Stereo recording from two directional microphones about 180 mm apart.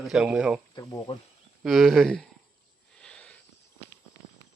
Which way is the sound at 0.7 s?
20° left (ahead or behind).